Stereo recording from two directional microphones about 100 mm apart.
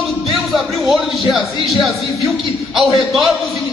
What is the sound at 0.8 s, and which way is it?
Speech, centre (ahead or behind).